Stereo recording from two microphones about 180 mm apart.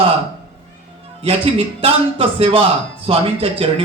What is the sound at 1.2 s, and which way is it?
A man's voice, 30° right (ahead or behind).